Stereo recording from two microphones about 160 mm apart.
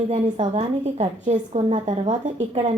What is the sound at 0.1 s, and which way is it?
A woman's voice, 40° right (ahead or behind).